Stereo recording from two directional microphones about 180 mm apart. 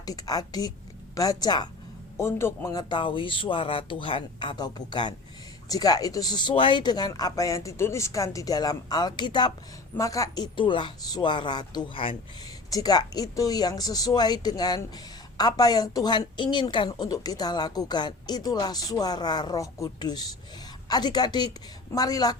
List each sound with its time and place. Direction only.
0.0 s a woman's voice: 20° left (ahead or behind)